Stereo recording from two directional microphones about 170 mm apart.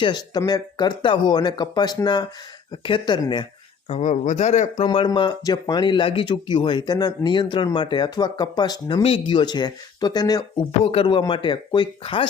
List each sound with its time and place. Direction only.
0.0 s speech: 25° left (ahead or behind)
3.8 s speech: 40° left (ahead or behind)
4.9 s speech: 30° left (ahead or behind)